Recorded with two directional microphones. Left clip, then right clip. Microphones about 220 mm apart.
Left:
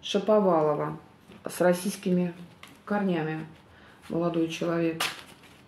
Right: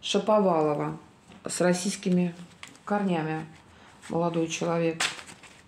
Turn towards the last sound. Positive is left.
turn(degrees=-40)  # may be behind; listen again after turning